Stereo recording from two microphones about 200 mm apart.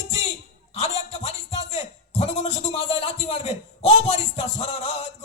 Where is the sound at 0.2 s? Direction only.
30° left (ahead or behind).